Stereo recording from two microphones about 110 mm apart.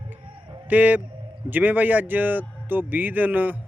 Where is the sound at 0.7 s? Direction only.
15° right (ahead or behind).